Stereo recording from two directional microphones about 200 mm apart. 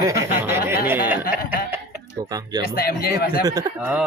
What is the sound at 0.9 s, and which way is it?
Chuckle, 10° right (ahead or behind).